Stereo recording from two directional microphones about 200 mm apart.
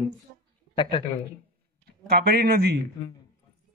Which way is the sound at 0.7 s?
25° left (ahead or behind).